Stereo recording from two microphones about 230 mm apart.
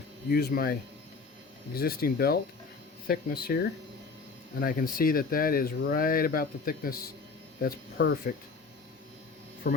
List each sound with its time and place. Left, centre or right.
0.3 s speech: left
9.6 s speech: left